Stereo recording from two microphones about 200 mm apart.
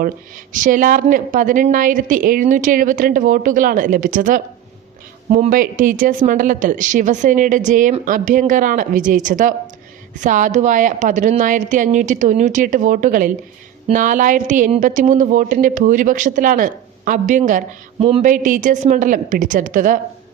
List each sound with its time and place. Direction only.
0.5 s speech: 40° right (ahead or behind)